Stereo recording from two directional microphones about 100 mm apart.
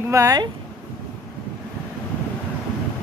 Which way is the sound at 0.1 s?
30° right (ahead or behind).